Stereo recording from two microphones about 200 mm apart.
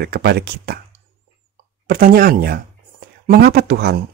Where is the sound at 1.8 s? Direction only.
45° right (ahead or behind).